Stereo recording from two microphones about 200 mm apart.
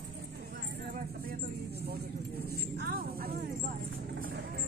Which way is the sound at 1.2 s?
50° right (ahead or behind).